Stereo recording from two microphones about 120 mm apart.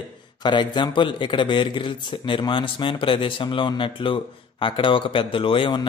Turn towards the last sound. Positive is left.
turn(degrees=45)  # may be behind; listen again after turning